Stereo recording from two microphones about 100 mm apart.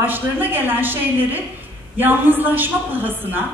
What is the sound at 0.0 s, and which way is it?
A woman's voice, 20° right (ahead or behind).